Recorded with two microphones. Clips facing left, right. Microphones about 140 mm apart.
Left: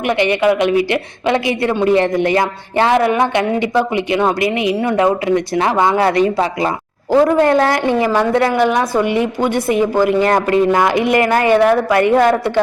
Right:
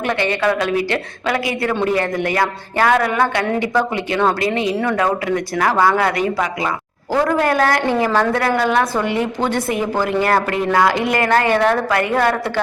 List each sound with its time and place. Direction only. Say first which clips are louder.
0.1 s a woman's voice: left 5 dB; 20° left (ahead or behind)